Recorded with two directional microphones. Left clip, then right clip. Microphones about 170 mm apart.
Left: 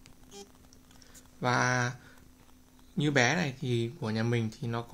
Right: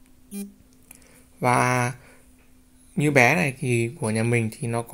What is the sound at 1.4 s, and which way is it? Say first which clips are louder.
Speech: right 7 dB; 25° right (ahead or behind).